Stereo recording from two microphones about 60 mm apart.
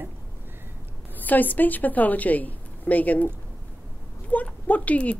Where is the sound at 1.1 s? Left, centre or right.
Left.